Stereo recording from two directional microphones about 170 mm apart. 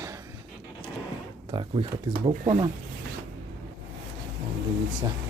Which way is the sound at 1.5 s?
30° right (ahead or behind).